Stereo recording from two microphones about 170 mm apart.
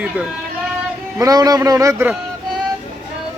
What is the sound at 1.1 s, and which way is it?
A man's voice, 20° right (ahead or behind).